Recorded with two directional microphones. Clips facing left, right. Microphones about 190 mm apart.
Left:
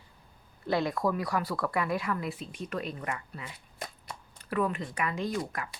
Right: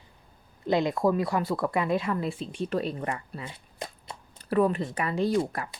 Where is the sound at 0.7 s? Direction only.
20° right (ahead or behind).